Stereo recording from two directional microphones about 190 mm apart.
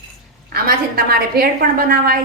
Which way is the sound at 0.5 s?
55° right (ahead or behind).